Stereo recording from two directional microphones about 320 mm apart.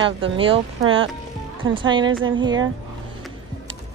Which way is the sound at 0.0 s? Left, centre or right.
Centre.